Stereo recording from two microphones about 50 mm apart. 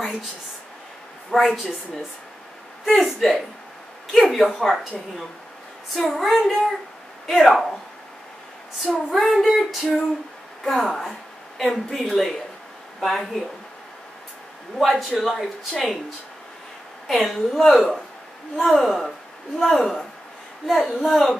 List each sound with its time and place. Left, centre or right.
1.3 s speech: centre
2.8 s speech: centre
5.9 s speech: centre
8.8 s speech: centre
9.8 s female singing: centre
10.6 s speech: centre
14.8 s speech: centre
17.1 s speech: centre